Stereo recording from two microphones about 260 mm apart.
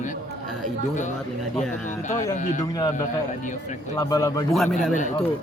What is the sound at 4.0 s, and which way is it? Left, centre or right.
Speech, centre.